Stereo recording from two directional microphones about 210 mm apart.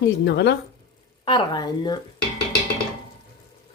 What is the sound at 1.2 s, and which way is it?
Speech, 20° left (ahead or behind).